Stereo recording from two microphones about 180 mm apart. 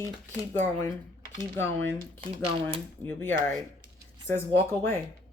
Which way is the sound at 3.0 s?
10° left (ahead or behind).